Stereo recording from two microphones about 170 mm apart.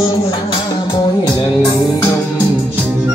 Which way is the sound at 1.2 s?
25° left (ahead or behind).